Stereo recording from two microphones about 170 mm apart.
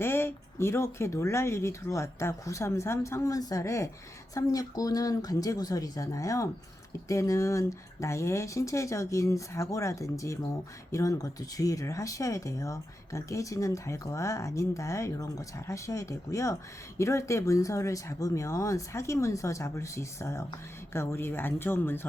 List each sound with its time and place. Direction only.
0.0 s speech: 15° left (ahead or behind)